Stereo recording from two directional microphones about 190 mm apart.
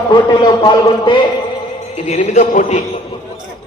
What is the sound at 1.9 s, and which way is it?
Speech, 35° left (ahead or behind).